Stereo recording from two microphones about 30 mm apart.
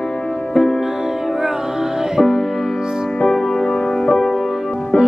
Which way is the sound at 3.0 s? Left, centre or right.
Centre.